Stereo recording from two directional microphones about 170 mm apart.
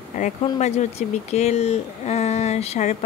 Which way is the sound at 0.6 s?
40° left (ahead or behind).